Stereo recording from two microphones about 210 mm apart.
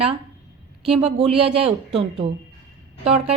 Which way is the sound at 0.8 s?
30° right (ahead or behind).